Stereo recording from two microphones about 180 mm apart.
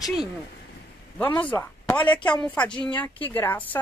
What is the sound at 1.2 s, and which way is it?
Speech, 10° left (ahead or behind).